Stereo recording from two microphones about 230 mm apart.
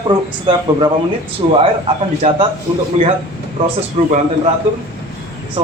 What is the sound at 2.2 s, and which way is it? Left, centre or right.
Speech, right.